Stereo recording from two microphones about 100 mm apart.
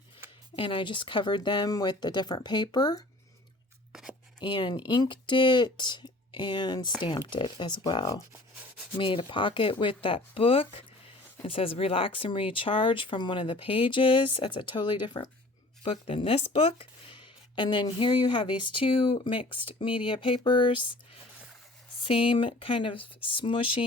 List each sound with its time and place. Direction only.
0.5 s speech: 60° left (ahead or behind)
4.4 s speech: 50° left (ahead or behind)
9.0 s speech: 60° left (ahead or behind)
22.0 s speech: 60° left (ahead or behind)